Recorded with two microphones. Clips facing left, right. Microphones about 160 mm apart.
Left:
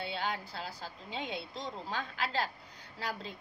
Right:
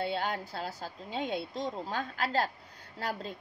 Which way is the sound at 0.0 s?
45° right (ahead or behind).